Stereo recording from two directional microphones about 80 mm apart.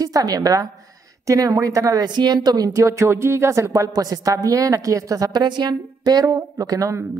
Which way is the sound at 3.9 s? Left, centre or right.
Right.